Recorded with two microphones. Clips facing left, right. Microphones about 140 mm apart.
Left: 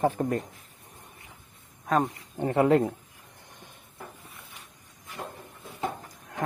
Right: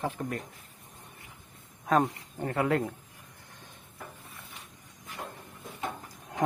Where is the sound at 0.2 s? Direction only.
50° left (ahead or behind).